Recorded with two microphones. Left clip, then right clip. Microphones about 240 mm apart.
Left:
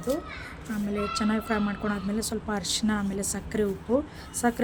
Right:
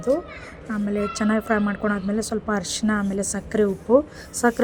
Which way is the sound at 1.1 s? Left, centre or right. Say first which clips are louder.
Right 6 dB; centre.